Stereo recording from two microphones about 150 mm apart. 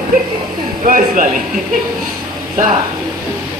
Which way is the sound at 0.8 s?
65° right (ahead or behind).